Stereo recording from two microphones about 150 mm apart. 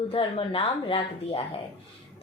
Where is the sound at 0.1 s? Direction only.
35° left (ahead or behind).